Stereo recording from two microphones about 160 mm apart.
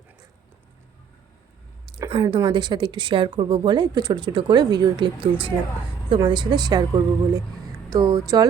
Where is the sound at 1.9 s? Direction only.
30° right (ahead or behind).